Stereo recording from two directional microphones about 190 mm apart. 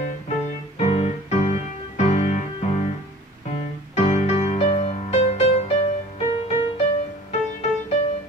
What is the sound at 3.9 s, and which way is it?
Music, 35° left (ahead or behind).